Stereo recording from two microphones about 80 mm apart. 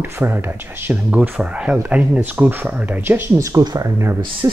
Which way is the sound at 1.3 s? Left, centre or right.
Centre.